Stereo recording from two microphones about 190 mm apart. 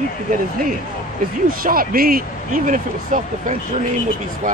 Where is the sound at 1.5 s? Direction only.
50° right (ahead or behind).